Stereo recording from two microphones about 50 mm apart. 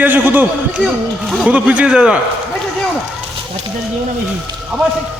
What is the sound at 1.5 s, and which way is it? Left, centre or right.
Speech, right.